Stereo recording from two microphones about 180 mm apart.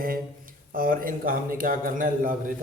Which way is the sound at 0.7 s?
50° right (ahead or behind).